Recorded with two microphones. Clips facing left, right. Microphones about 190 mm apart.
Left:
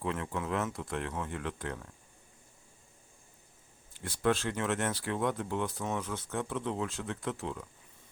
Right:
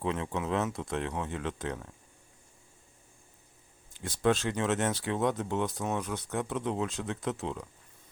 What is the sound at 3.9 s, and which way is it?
Speech, 20° right (ahead or behind).